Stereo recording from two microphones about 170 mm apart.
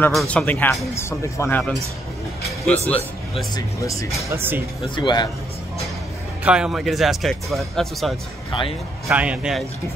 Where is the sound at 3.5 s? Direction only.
20° left (ahead or behind).